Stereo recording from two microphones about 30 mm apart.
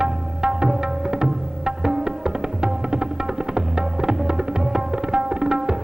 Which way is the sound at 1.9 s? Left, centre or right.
Right.